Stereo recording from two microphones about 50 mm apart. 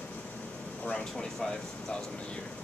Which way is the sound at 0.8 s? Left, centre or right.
Centre.